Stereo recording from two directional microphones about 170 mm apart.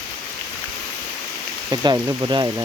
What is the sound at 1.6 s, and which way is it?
Speech, 20° right (ahead or behind).